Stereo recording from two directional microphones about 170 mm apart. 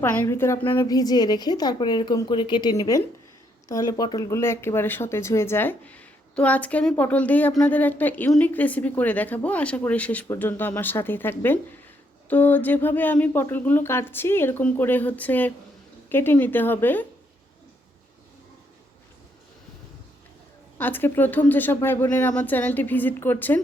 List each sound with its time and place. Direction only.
0.0 s a woman's voice: 10° left (ahead or behind)
20.7 s speech: 10° left (ahead or behind)